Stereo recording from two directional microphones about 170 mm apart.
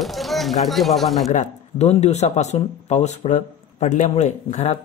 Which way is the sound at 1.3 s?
40° left (ahead or behind).